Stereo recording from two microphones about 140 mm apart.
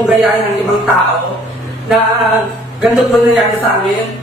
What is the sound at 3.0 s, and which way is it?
Speech, centre (ahead or behind).